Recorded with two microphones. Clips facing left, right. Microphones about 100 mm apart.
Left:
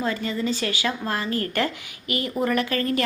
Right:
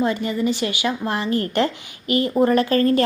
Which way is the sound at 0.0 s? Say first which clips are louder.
Right 5 dB; 20° right (ahead or behind).